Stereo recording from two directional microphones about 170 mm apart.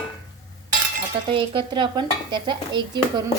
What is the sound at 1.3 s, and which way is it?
Stir, 30° right (ahead or behind).